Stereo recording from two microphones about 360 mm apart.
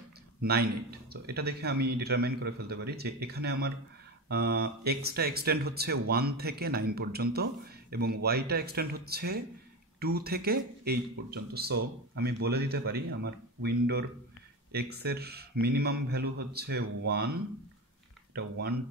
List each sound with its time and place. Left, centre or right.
0.4 s a man's voice: right